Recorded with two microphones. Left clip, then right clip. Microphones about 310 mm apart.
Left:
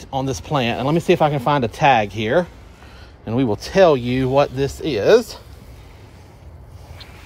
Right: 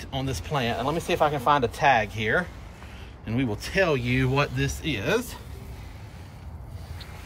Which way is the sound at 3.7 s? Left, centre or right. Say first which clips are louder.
Left 10 dB; centre.